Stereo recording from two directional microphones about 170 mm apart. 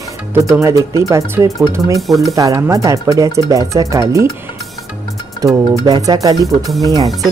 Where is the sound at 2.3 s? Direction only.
20° right (ahead or behind).